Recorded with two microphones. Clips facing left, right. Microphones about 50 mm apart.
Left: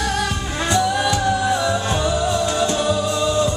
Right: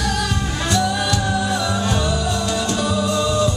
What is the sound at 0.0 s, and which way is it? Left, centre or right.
Music, left.